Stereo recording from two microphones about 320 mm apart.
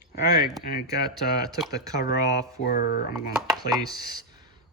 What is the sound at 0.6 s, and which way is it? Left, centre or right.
Speech, left.